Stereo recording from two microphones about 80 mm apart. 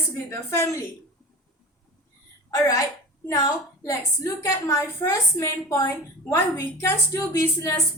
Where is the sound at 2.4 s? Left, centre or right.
Left.